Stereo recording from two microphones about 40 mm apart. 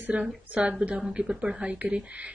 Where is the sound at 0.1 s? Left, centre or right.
Right.